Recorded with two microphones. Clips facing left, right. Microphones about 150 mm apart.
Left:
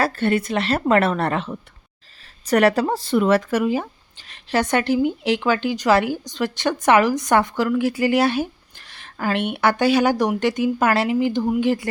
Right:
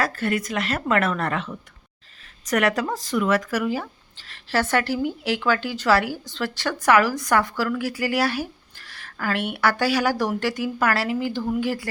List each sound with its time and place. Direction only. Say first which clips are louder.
0.0 s speech: left 4 dB; 30° left (ahead or behind)